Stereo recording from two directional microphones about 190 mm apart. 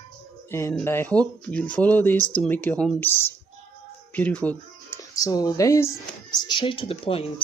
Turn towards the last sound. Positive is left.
turn(degrees=30)  # may be behind; listen again after turning